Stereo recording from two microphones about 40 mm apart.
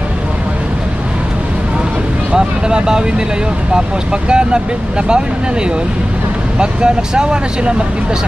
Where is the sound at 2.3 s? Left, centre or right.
Centre.